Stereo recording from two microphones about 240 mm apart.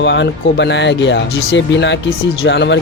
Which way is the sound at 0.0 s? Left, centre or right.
Left.